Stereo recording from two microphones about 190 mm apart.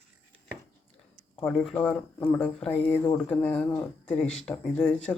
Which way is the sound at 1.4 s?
5° left (ahead or behind).